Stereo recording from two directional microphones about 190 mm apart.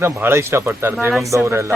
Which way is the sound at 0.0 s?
10° right (ahead or behind).